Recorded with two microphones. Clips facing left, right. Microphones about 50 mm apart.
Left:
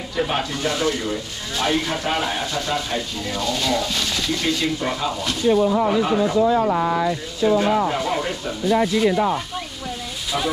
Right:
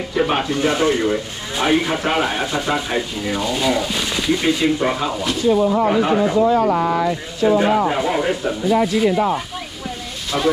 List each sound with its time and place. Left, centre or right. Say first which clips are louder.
0.1 s speech: right 4 dB; right
1.7 s speech: right 5 dB; centre
5.0 s speech: right 2 dB; centre
5.9 s speech: right 3 dB; right
6.5 s speech: right 2 dB; right
7.4 s speech: right 3 dB; right
7.9 s speech: right 4 dB; centre
10.3 s speech: right 5 dB; right